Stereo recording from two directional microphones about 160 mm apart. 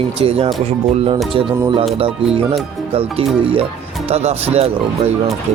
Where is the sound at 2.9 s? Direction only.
40° right (ahead or behind).